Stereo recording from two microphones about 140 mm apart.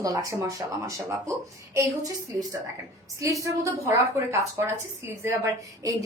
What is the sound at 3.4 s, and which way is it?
A woman's voice, 20° right (ahead or behind).